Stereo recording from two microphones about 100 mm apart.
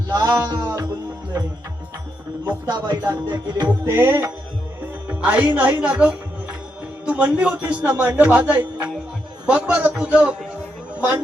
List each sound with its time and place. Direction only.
0.1 s music: 40° right (ahead or behind)
2.6 s music: 45° right (ahead or behind)
3.8 s music: 25° right (ahead or behind)
5.0 s a man's voice: 15° right (ahead or behind)